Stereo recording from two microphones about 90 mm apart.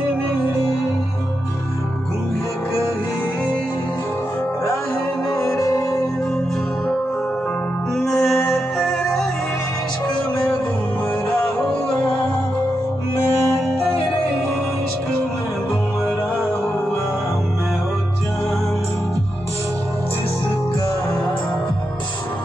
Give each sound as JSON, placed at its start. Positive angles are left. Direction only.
{"t": 5.6, "sound": "music", "side_deg": 40}
{"t": 8.0, "sound": "music", "side_deg": 5}
{"t": 11.6, "sound": "music", "side_deg": 5}
{"t": 13.5, "sound": "music", "side_deg": 5}